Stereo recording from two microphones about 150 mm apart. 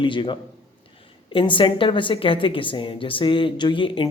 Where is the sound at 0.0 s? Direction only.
35° left (ahead or behind).